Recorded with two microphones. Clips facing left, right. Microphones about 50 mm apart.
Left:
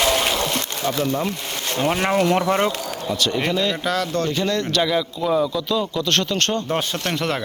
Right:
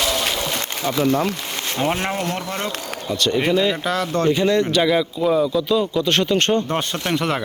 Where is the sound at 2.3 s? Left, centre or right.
Left.